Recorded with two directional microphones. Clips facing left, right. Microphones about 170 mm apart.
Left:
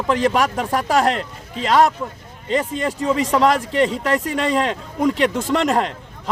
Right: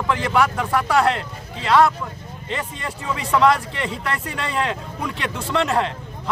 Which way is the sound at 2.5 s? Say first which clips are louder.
Left 9 dB; 40° left (ahead or behind).